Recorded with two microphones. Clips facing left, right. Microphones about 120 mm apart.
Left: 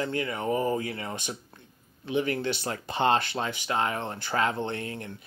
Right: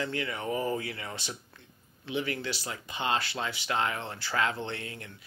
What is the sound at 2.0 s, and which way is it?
Speech, 45° left (ahead or behind).